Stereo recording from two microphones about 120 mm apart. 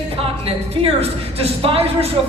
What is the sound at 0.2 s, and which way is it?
A woman's voice, 55° right (ahead or behind).